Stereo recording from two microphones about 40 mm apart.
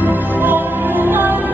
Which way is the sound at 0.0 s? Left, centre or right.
Right.